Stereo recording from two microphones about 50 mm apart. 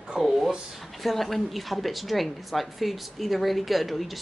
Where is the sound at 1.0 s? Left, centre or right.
Centre.